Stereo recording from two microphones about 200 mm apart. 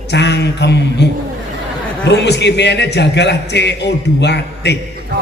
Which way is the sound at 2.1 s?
60° left (ahead or behind).